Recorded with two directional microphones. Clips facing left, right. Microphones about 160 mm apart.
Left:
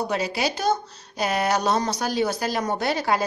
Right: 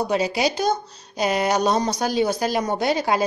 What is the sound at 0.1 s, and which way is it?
Speech, 15° right (ahead or behind).